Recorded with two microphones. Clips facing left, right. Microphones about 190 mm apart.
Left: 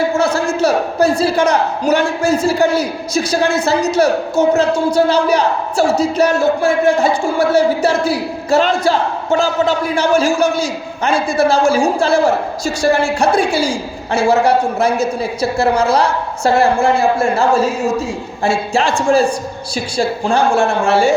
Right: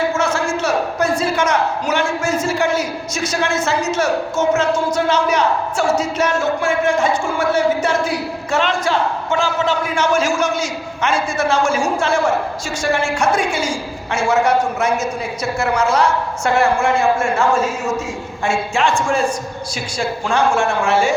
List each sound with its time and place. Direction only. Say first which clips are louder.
0.1 s a man's voice: left 3 dB; 35° left (ahead or behind)